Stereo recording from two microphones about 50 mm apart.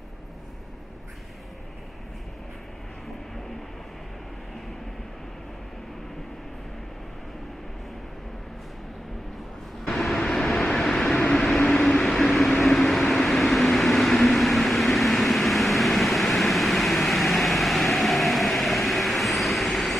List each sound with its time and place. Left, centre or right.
9.8 s vehicle: centre
11.1 s vehicle: left; by 20.0 s centre